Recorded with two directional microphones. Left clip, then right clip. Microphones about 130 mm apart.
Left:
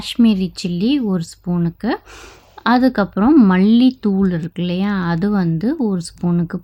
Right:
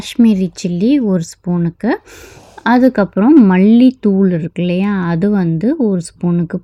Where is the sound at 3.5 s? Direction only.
15° right (ahead or behind).